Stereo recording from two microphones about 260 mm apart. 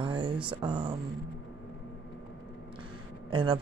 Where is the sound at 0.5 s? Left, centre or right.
Centre.